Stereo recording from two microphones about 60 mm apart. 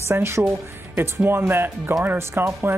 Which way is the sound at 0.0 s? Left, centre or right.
Right.